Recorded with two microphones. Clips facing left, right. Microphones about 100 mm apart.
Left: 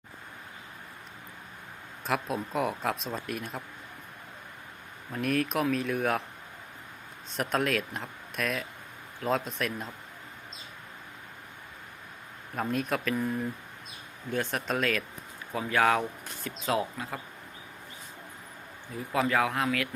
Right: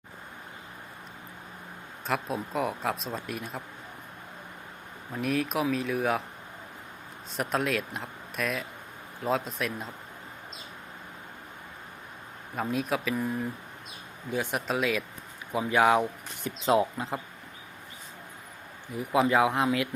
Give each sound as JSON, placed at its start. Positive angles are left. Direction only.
{"t": 2.0, "sound": "speech", "side_deg": 0}
{"t": 5.1, "sound": "speech", "side_deg": 0}
{"t": 7.3, "sound": "speech", "side_deg": 0}
{"t": 12.5, "sound": "speech", "side_deg": 0}
{"t": 16.6, "sound": "speech", "side_deg": -25}
{"t": 18.9, "sound": "speech", "side_deg": -15}